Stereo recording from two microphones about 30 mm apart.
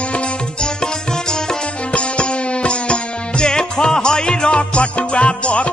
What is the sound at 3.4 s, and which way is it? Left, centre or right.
Music, left.